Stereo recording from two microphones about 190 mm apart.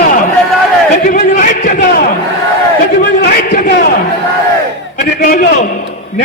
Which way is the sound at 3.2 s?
55° left (ahead or behind).